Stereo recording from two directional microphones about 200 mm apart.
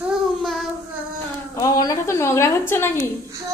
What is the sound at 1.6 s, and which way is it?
A woman's voice, 15° left (ahead or behind).